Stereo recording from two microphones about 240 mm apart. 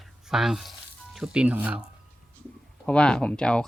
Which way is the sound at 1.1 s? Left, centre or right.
Centre.